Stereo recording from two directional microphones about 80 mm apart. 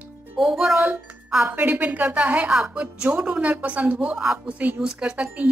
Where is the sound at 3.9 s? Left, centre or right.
Centre.